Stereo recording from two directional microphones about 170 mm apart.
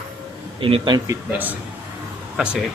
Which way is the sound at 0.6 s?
25° right (ahead or behind).